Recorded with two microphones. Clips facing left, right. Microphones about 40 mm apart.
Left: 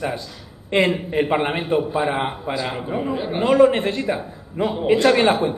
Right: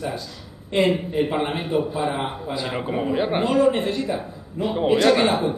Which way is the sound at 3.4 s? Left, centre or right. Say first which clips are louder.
Left 6 dB; left.